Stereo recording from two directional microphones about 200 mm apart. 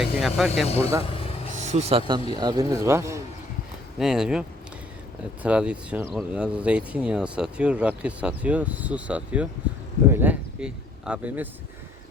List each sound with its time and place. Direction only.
0.0 s speech: centre (ahead or behind)
0.8 s speech: 15° right (ahead or behind)
1.0 s vehicle: 30° left (ahead or behind)
1.6 s speech: 30° right (ahead or behind); by 3.2 s 15° right (ahead or behind)
3.9 s speech: 5° right (ahead or behind)